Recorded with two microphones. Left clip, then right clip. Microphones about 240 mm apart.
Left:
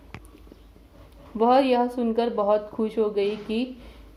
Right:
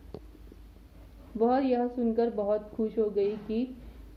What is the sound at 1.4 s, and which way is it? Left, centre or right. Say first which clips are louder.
A woman's voice: left 7 dB; centre.